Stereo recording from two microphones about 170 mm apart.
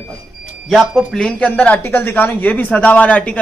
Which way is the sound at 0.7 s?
Centre (ahead or behind).